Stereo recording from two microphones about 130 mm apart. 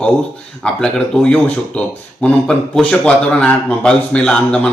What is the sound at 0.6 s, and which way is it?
A man's voice, 5° left (ahead or behind).